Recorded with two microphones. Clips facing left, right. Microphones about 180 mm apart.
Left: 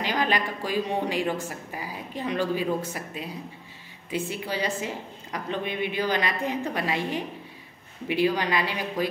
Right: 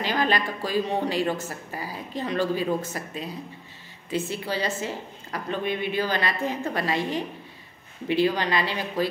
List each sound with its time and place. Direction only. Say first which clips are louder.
0.0 s a woman's voice: right 1 dB; 15° left (ahead or behind)